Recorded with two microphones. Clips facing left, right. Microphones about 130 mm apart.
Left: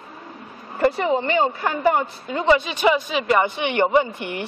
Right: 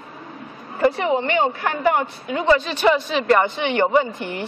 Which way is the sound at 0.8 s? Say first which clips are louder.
Right 1 dB; centre (ahead or behind).